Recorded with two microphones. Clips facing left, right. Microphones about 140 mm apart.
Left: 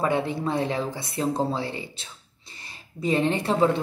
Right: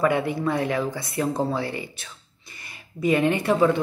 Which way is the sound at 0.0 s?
25° left (ahead or behind).